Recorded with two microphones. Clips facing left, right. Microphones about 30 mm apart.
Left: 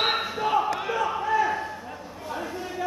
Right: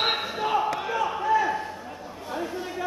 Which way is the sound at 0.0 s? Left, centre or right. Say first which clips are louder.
Left 1 dB; centre.